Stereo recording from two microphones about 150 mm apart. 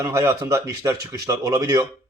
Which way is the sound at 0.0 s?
20° right (ahead or behind).